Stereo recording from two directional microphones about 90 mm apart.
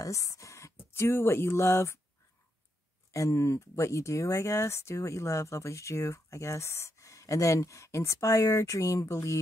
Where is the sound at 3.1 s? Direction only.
35° left (ahead or behind).